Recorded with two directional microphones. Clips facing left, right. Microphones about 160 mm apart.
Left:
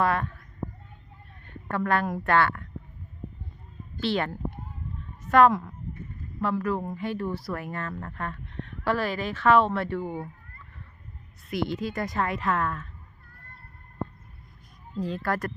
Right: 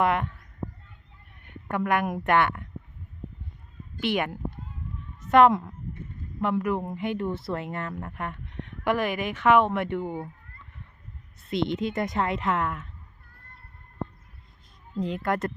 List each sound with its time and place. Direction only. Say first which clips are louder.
0.0 s speech: right 1 dB; 20° right (ahead or behind)
1.5 s a woman's voice: even; 15° right (ahead or behind)
4.0 s speech: even; 15° right (ahead or behind)
11.4 s speech: right 2 dB; 25° right (ahead or behind)
14.9 s speech: right 1 dB; 20° right (ahead or behind)